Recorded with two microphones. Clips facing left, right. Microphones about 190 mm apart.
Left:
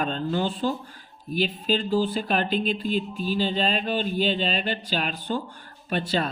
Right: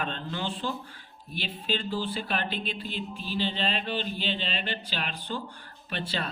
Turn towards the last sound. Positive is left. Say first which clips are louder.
# left 8 dB
turn(degrees=45)  # may be behind; listen again after turning